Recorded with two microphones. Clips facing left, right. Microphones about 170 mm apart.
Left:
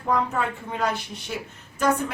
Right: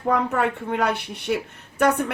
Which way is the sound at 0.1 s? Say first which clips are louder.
Right 3 dB; 60° right (ahead or behind).